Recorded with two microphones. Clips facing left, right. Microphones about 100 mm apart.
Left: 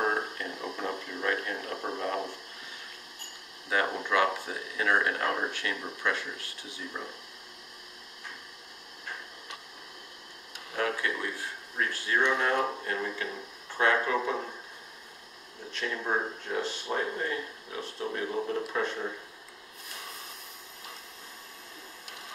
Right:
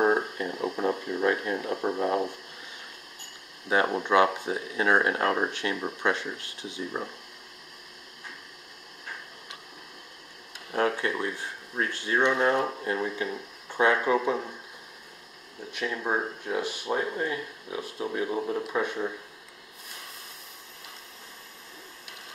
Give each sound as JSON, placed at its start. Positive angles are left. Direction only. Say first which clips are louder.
{"t": 0.0, "sound": "a sound", "louder": "right 6 dB", "side_deg": -20}
{"t": 3.6, "sound": "speech", "louder": "right 4 dB", "side_deg": -25}
{"t": 11.0, "sound": "speech", "louder": "right 3 dB", "side_deg": -30}
{"t": 15.7, "sound": "speech", "louder": "right 2 dB", "side_deg": -10}